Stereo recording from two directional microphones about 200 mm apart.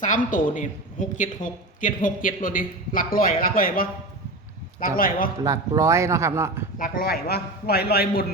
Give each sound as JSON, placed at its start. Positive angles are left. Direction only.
{"t": 0.3, "sound": "speech", "side_deg": 40}
{"t": 4.9, "sound": "speech", "side_deg": 45}
{"t": 5.4, "sound": "speech", "side_deg": -15}
{"t": 6.7, "sound": "speech", "side_deg": 45}